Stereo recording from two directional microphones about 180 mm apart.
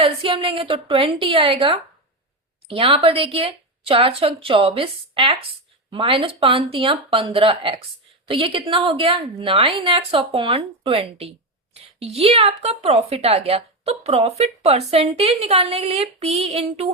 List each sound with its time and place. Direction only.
0.0 s speech: 30° right (ahead or behind)